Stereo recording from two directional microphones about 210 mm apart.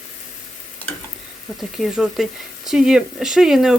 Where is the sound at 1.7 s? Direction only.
Centre (ahead or behind).